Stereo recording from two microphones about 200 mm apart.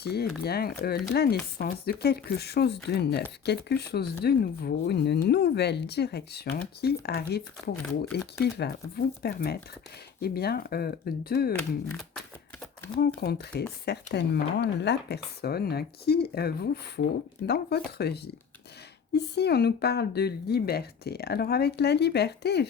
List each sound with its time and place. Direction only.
0.0 s speech: 50° left (ahead or behind)
7.8 s speech: 5° left (ahead or behind)
8.5 s speech: 55° left (ahead or behind)
13.0 s speech: 55° left (ahead or behind)